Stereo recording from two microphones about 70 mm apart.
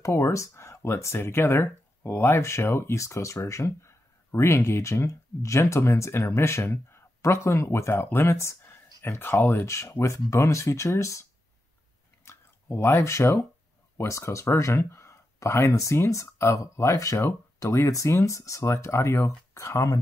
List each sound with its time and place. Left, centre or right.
0.0 s speech: left
9.7 s speech: left
12.3 s speech: left